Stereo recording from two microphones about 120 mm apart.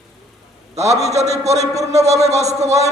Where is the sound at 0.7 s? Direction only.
65° right (ahead or behind).